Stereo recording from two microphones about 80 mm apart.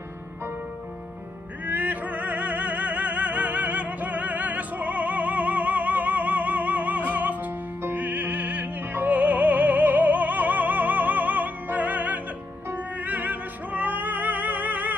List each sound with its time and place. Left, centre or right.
1.7 s opera: right
12.7 s music: right